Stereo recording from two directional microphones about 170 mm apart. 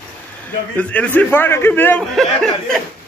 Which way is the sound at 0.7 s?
10° left (ahead or behind).